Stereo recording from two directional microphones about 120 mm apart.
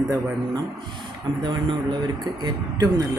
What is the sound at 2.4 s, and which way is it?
Speech, 30° right (ahead or behind).